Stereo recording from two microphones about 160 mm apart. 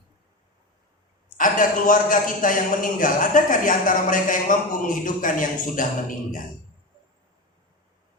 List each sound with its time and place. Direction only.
1.4 s a man's voice: 60° left (ahead or behind)